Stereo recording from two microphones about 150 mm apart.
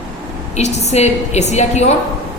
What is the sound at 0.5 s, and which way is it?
A woman's voice, 45° left (ahead or behind).